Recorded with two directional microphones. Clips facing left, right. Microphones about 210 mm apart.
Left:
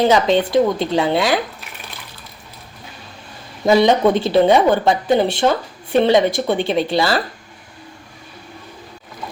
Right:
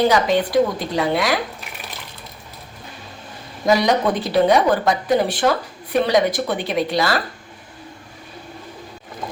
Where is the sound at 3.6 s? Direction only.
25° left (ahead or behind).